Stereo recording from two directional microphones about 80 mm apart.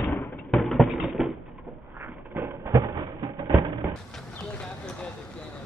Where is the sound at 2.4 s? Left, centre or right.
Right.